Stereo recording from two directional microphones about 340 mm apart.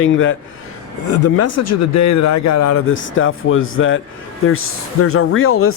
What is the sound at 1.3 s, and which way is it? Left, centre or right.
Speech, left.